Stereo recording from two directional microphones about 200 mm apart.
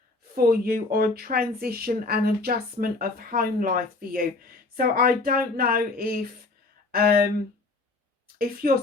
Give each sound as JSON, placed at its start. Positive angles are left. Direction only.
{"t": 0.3, "sound": "speech", "side_deg": -45}
{"t": 8.4, "sound": "speech", "side_deg": -45}